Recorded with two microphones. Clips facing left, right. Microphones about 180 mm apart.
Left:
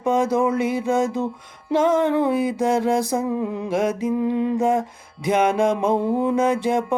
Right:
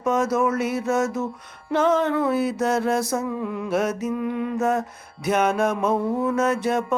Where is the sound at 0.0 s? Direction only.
15° left (ahead or behind).